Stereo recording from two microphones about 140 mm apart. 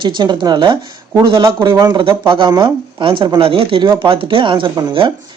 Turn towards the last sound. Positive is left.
turn(degrees=-35)  # may be behind; listen again after turning